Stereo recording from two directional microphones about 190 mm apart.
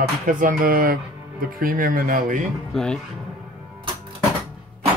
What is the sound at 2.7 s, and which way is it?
Speech, 5° left (ahead or behind).